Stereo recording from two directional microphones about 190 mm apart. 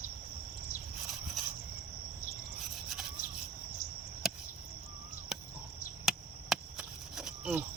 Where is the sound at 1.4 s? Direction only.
Centre (ahead or behind).